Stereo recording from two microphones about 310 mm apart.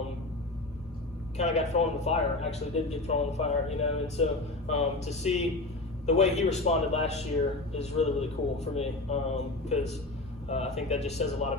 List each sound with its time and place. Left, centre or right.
1.4 s speech: left